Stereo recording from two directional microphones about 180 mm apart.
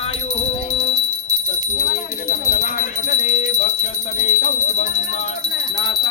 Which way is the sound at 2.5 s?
45° left (ahead or behind).